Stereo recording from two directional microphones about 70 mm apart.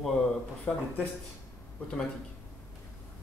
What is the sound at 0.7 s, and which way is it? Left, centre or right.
Speech, centre.